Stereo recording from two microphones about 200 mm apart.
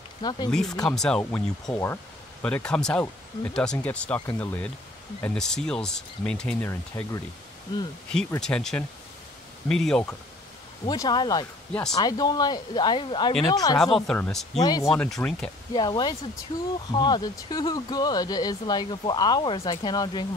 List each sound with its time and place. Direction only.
0.2 s speech: 20° left (ahead or behind)
0.5 s speech: centre (ahead or behind)
8.4 s speech: 5° left (ahead or behind)
10.9 s speech: 20° left (ahead or behind)
13.9 s speech: 5° left (ahead or behind)
14.6 s speech: 20° left (ahead or behind)
14.9 s speech: centre (ahead or behind)
15.7 s speech: 20° left (ahead or behind)